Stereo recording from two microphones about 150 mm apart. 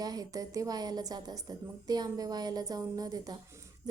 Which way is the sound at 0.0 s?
25° right (ahead or behind).